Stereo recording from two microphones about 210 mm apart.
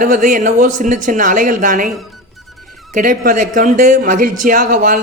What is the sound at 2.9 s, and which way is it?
Speech, 40° right (ahead or behind).